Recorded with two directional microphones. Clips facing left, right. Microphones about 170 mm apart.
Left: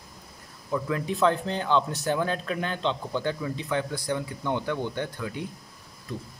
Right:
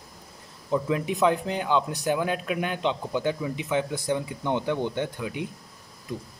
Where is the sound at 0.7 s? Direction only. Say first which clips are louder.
Right 3 dB; 20° right (ahead or behind).